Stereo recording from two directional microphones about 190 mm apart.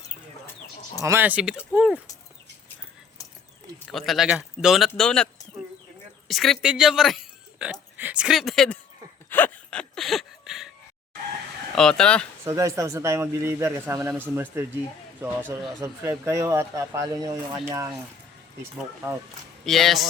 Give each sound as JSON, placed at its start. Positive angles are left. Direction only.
{"t": 1.0, "sound": "speech", "side_deg": -10}
{"t": 3.8, "sound": "speech", "side_deg": 0}
{"t": 9.3, "sound": "a sound", "side_deg": 10}
{"t": 11.7, "sound": "speech", "side_deg": 5}
{"t": 12.5, "sound": "speech", "side_deg": -15}
{"t": 19.6, "sound": "speech", "side_deg": 0}